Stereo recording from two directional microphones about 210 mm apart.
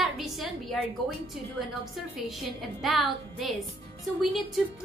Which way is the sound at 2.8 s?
Centre (ahead or behind).